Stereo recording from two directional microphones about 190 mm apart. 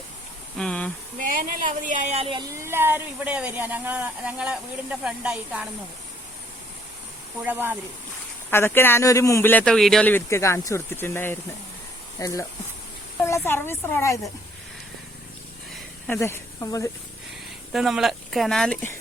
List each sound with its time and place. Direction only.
0.5 s a sound: 5° left (ahead or behind)
1.2 s speech: 45° right (ahead or behind); by 5.6 s 5° right (ahead or behind)
7.4 s speech: 10° right (ahead or behind)
8.4 s a woman's voice: 10° left (ahead or behind)
16.0 s speech: 10° left (ahead or behind)
17.7 s speech: centre (ahead or behind)